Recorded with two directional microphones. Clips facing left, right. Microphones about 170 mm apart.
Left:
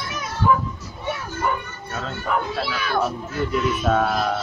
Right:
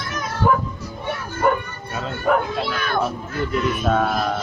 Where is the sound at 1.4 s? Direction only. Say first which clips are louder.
Right 6 dB; 55° right (ahead or behind).